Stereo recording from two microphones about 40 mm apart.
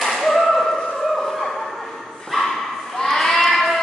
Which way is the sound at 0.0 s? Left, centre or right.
Centre.